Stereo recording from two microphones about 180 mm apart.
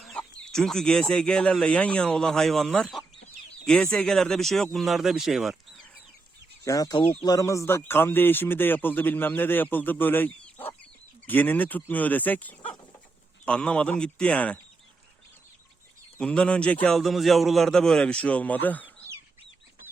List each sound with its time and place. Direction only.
0.0 s speech: 5° left (ahead or behind)
6.7 s speech: 20° left (ahead or behind)
16.1 s speech: 5° left (ahead or behind)